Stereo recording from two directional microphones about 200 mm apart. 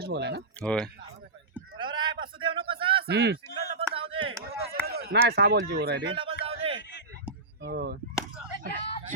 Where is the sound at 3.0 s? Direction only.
55° right (ahead or behind).